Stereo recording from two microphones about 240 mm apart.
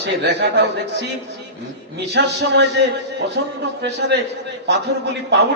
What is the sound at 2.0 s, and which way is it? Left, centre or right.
A man's voice, right.